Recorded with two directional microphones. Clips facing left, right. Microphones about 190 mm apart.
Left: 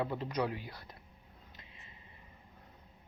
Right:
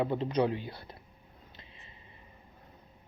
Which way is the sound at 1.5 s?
30° right (ahead or behind).